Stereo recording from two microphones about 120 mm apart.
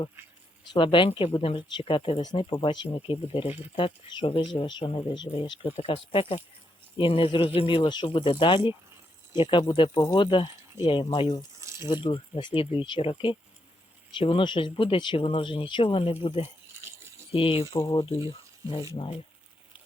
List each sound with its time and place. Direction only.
0.7 s speech: 45° left (ahead or behind)
11.6 s a sound: 25° right (ahead or behind)
12.0 s speech: 45° left (ahead or behind)
16.8 s rattle: 25° right (ahead or behind)
17.3 s speech: 50° left (ahead or behind)
19.0 s speech: 50° left (ahead or behind)